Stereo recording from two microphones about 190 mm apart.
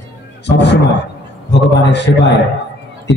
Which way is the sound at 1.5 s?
65° left (ahead or behind).